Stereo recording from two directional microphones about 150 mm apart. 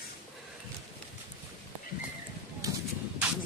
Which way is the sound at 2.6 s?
25° right (ahead or behind).